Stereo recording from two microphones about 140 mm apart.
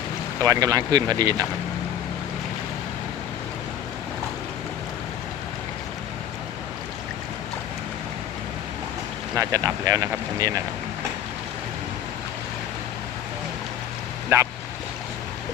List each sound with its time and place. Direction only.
0.4 s speech: 25° right (ahead or behind)
9.3 s speech: 25° right (ahead or behind)
14.3 s speech: 20° right (ahead or behind)